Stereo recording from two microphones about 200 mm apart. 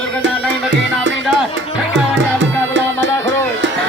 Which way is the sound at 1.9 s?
65° right (ahead or behind).